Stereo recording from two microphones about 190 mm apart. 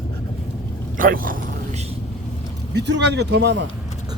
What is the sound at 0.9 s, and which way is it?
Speech, 50° right (ahead or behind).